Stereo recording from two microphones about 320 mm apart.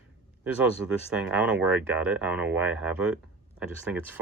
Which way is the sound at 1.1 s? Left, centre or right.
Centre.